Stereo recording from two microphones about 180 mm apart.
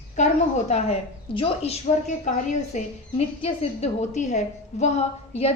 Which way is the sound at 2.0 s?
40° left (ahead or behind).